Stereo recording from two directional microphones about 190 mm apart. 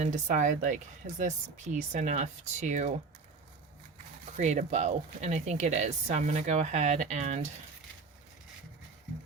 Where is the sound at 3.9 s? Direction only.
40° right (ahead or behind).